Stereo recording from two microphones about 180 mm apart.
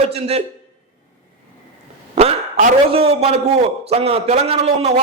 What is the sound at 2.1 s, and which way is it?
A man's voice, 35° right (ahead or behind).